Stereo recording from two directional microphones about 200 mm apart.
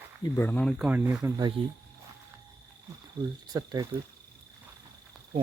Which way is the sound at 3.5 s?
20° right (ahead or behind).